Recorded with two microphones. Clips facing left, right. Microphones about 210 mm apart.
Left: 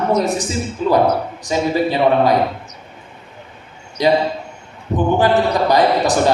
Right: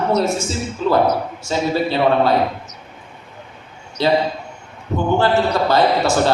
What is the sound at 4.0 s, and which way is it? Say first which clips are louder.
Speech: left 2 dB; 15° left (ahead or behind).